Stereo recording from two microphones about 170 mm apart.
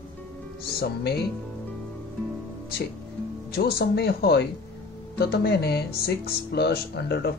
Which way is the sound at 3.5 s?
65° left (ahead or behind).